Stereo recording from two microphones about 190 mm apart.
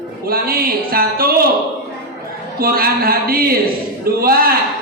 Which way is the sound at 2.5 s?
50° right (ahead or behind).